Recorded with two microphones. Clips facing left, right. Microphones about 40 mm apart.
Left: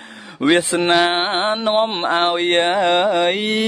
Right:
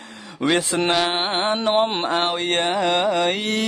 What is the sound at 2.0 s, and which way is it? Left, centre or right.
Mantra, left.